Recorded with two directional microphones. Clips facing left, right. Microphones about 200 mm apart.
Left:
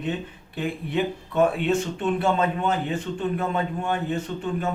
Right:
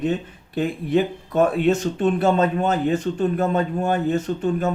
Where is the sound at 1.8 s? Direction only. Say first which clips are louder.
Right 4 dB; 40° right (ahead or behind).